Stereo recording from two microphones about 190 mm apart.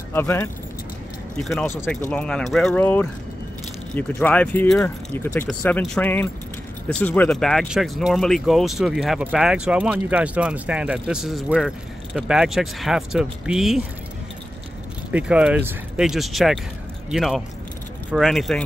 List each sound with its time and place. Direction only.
0.1 s speech: 10° left (ahead or behind)
15.0 s speech: 5° right (ahead or behind)